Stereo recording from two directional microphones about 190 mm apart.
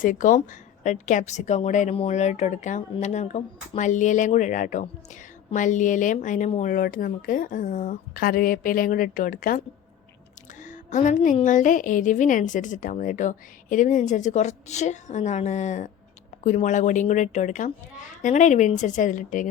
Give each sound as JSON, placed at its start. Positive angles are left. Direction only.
{"t": 0.0, "sound": "a woman's voice", "side_deg": 45}
{"t": 10.6, "sound": "a woman's voice", "side_deg": 40}